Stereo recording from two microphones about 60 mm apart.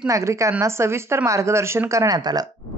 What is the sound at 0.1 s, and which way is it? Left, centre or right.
A woman's voice, right.